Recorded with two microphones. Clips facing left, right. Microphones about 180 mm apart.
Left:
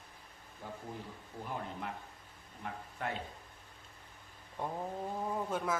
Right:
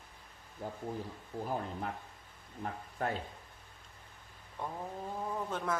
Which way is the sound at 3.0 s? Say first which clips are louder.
Right 4 dB; 40° right (ahead or behind).